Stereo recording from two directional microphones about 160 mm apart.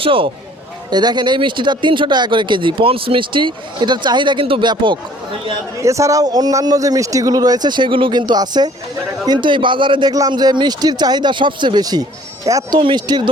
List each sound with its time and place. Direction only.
0.0 s speech: 35° right (ahead or behind)